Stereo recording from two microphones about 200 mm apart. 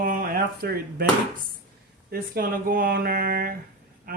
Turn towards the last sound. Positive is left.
turn(degrees=-45)  # may be behind; listen again after turning